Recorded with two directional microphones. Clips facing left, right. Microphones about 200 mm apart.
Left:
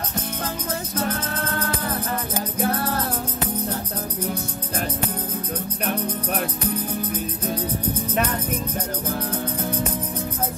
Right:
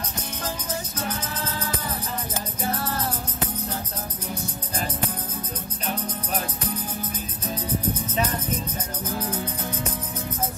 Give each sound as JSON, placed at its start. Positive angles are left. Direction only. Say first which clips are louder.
{"t": 0.9, "sound": "music", "louder": "left 5 dB", "side_deg": 55}